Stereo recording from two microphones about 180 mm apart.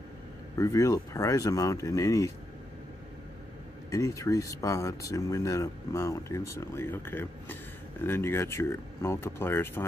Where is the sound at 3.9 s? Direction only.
15° left (ahead or behind).